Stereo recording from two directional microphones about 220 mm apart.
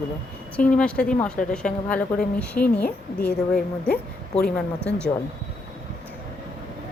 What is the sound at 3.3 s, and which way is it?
Speech, 45° left (ahead or behind).